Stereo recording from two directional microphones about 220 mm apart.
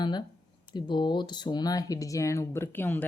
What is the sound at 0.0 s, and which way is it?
Speech, 20° left (ahead or behind).